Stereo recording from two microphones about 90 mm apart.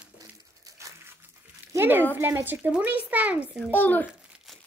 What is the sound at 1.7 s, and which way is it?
A woman's voice, 25° right (ahead or behind).